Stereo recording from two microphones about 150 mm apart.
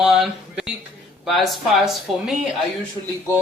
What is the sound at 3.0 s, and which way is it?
Speech, 35° left (ahead or behind).